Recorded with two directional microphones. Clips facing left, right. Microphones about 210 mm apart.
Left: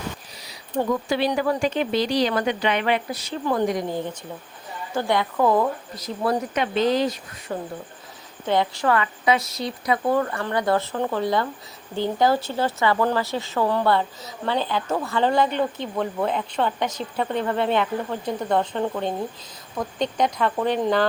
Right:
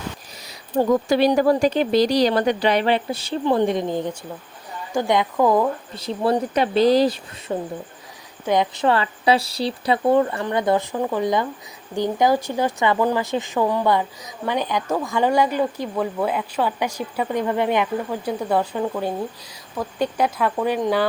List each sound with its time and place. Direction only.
0.4 s speech: 40° right (ahead or behind); by 5.6 s 10° right (ahead or behind)
5.9 s speech: 30° right (ahead or behind)
8.4 s speech: 20° right (ahead or behind)